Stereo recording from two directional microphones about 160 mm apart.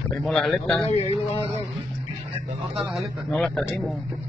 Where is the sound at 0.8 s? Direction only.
40° left (ahead or behind).